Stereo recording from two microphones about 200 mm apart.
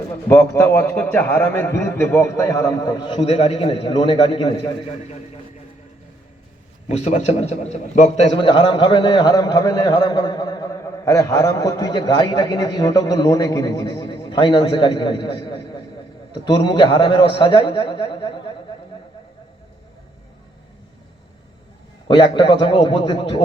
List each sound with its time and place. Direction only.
0.3 s a man's voice: 10° left (ahead or behind)
6.8 s a man's voice: 35° left (ahead or behind)
22.0 s a man's voice: 25° left (ahead or behind)